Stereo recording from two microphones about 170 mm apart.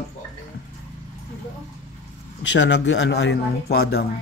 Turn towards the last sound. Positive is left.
turn(degrees=75)  # may be behind; listen again after turning